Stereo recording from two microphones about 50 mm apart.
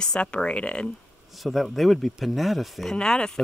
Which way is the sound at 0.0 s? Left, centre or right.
Centre.